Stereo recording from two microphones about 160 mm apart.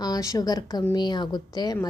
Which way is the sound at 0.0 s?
20° left (ahead or behind).